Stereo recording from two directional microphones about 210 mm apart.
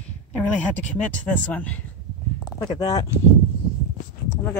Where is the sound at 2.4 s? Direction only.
20° left (ahead or behind).